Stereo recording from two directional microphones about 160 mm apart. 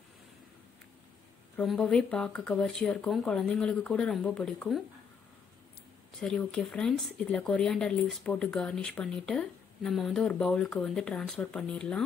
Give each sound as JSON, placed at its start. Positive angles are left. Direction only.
{"t": 1.6, "sound": "speech", "side_deg": 5}
{"t": 6.2, "sound": "speech", "side_deg": 5}